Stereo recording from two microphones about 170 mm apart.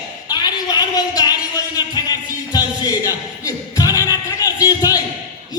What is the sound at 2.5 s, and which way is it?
Music, 20° left (ahead or behind).